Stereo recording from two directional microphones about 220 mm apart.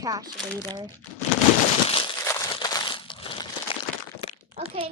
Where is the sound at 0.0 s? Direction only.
15° right (ahead or behind).